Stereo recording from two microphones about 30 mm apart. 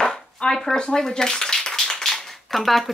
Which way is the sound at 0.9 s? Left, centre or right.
Centre.